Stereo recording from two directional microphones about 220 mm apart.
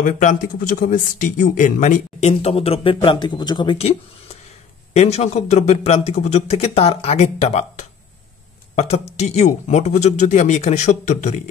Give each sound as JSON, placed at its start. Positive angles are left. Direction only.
{"t": 0.0, "sound": "speech", "side_deg": 35}